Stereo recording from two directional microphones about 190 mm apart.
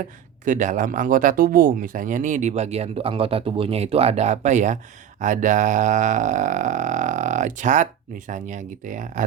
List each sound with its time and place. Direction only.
0.4 s speech: 40° right (ahead or behind)